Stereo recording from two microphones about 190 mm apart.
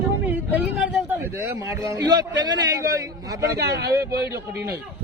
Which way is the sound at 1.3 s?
15° right (ahead or behind).